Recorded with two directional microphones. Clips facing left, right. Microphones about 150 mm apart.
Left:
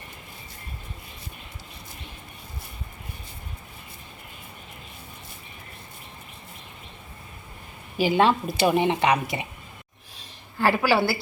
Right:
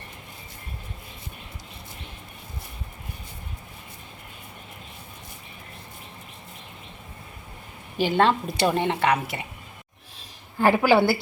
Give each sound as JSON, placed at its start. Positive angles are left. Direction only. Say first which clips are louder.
{"t": 7.9, "sound": "speech", "louder": "left 1 dB", "side_deg": 10}
{"t": 10.6, "sound": "a woman's voice", "louder": "right 3 dB", "side_deg": -20}